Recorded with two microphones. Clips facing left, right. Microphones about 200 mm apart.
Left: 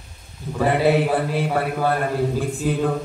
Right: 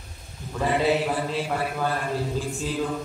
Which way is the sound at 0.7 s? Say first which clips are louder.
Left 5 dB; 60° left (ahead or behind).